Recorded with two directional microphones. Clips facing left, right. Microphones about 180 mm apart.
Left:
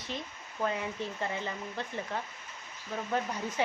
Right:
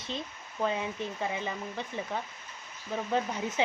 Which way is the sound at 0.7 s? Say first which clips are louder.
Right 1 dB; 20° right (ahead or behind).